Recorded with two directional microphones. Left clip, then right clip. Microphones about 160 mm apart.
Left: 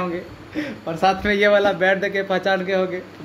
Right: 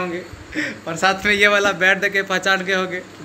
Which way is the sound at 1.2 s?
30° left (ahead or behind).